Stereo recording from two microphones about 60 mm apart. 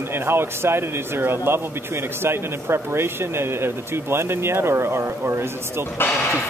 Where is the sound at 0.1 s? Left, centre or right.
Right.